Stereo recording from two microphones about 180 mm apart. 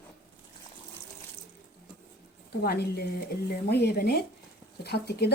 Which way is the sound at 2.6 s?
60° left (ahead or behind).